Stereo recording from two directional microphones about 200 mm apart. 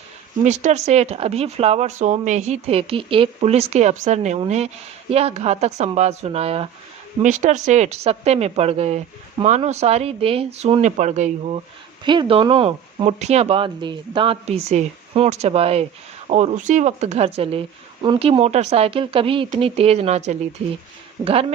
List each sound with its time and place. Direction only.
0.4 s speech: 35° right (ahead or behind)
12.0 s speech: 25° right (ahead or behind)
21.2 s a man's voice: 15° right (ahead or behind)